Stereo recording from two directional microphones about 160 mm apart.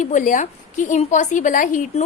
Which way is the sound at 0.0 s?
50° left (ahead or behind).